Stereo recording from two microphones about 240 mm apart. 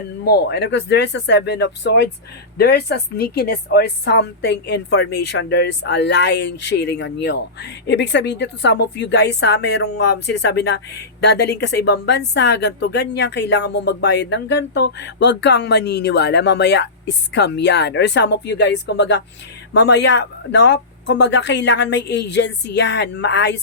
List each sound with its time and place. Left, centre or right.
0.3 s a woman's voice: left